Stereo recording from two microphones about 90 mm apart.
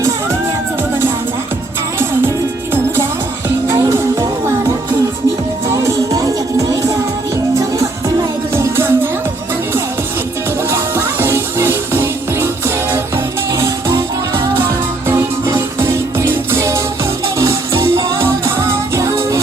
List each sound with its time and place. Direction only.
2.7 s music: 25° right (ahead or behind)
8.5 s music: 30° right (ahead or behind)
10.7 s music: 30° right (ahead or behind)
15.8 s music: 25° right (ahead or behind)